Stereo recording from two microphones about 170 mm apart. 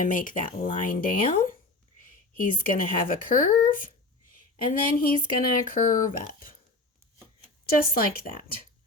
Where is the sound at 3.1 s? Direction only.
55° left (ahead or behind).